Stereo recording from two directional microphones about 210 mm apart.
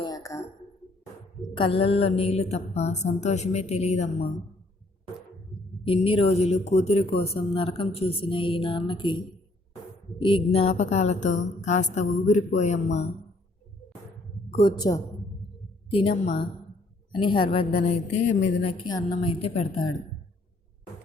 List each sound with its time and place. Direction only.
0.0 s a sound: 15° left (ahead or behind)
1.5 s a woman's voice: 25° left (ahead or behind)
5.8 s a woman's voice: 25° left (ahead or behind)
14.5 s speech: 20° left (ahead or behind)